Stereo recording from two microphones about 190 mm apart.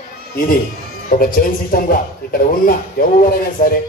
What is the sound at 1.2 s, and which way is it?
A man's voice, 50° left (ahead or behind).